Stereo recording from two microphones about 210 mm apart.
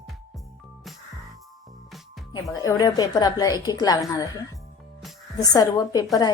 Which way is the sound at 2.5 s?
15° left (ahead or behind).